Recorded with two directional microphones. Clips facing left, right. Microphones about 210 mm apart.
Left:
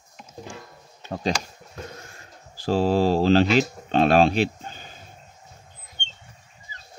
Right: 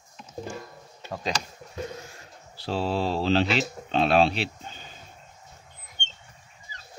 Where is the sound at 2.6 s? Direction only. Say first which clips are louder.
Left 7 dB; 45° left (ahead or behind).